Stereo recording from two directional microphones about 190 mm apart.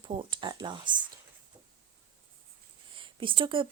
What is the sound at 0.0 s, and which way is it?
Speech, 25° right (ahead or behind).